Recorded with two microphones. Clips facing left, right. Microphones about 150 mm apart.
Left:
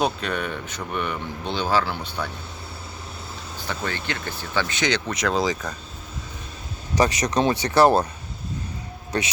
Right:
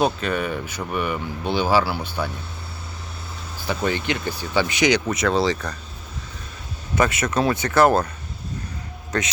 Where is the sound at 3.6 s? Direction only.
15° right (ahead or behind); by 5.7 s 5° left (ahead or behind).